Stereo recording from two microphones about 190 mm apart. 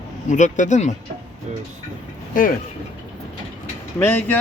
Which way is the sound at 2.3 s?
45° left (ahead or behind).